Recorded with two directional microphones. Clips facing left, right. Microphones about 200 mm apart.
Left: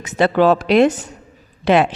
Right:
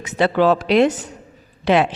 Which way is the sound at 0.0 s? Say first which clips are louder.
Left 2 dB; 45° left (ahead or behind).